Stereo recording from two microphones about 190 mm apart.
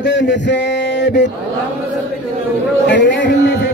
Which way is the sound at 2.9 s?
70° left (ahead or behind).